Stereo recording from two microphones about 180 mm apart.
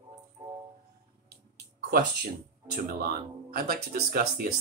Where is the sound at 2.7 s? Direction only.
55° right (ahead or behind).